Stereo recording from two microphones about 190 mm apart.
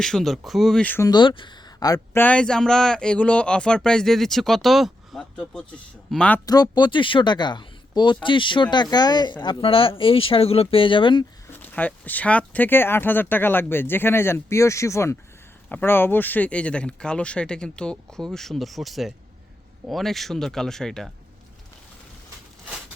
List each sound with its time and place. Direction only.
0.0 s speech: centre (ahead or behind)
1.1 s speech: 25° left (ahead or behind); by 6.4 s 5° left (ahead or behind)
6.4 s speech: 20° left (ahead or behind)
11.6 s speech: 10° left (ahead or behind)